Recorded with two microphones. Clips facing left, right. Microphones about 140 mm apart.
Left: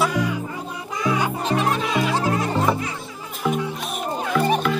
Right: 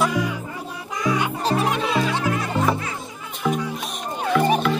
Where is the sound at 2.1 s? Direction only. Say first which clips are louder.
Left 2 dB; 30° left (ahead or behind).